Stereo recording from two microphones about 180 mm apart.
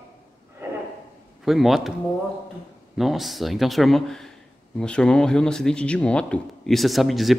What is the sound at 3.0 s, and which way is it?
Speech, centre (ahead or behind).